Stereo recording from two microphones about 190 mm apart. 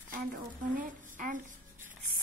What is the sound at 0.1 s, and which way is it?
Speech, 45° right (ahead or behind).